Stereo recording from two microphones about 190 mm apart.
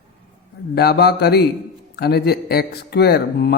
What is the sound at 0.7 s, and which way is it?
Speech, 55° left (ahead or behind).